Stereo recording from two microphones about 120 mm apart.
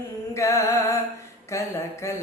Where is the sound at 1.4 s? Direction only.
25° left (ahead or behind).